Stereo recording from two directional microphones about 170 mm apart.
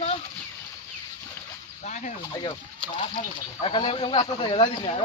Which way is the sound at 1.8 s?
45° left (ahead or behind).